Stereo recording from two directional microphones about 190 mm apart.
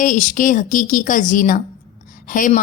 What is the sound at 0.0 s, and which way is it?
A woman's voice, 40° left (ahead or behind).